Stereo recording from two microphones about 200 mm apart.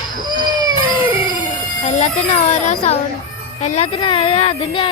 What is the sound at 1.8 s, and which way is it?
Music, 35° left (ahead or behind).